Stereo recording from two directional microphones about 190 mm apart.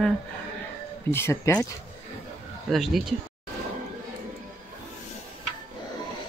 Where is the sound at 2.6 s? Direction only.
Centre (ahead or behind).